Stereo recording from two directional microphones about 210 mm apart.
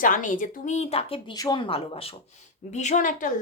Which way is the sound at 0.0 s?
40° left (ahead or behind).